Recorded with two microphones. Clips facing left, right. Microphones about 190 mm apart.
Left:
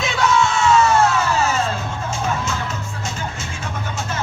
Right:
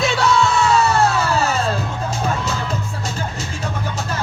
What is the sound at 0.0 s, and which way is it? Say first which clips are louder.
Music: right 1 dB; 35° right (ahead or behind).